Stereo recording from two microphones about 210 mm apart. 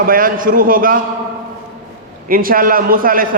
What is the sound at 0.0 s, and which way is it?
Speech, 40° right (ahead or behind).